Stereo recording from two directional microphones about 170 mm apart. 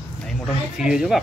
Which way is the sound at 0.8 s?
5° right (ahead or behind).